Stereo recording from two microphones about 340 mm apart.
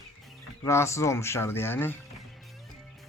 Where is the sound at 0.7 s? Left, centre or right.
Centre.